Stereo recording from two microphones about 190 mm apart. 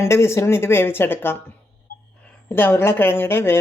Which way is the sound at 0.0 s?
15° left (ahead or behind).